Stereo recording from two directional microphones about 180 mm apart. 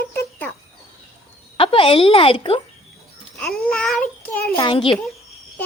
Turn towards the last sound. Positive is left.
turn(degrees=30)  # may be behind; listen again after turning